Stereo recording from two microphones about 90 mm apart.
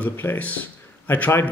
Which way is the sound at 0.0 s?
20° left (ahead or behind).